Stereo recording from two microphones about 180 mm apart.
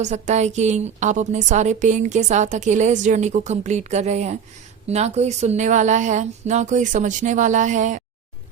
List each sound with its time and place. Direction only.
0.0 s a woman's voice: 40° right (ahead or behind)